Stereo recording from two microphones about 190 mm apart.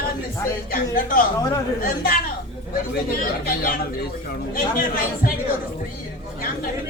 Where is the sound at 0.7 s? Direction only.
45° left (ahead or behind).